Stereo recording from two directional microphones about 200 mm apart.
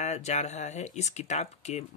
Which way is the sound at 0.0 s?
35° left (ahead or behind).